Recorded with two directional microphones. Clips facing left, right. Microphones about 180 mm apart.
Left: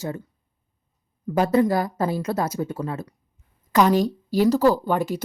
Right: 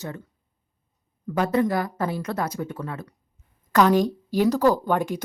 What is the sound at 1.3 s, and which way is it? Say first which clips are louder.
Speech: left 3 dB; 30° left (ahead or behind).